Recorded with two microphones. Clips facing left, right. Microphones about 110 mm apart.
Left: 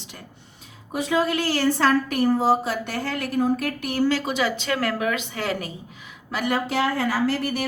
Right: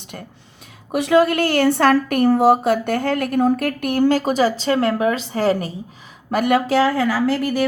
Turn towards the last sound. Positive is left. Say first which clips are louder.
# right 4 dB
turn(degrees=-90)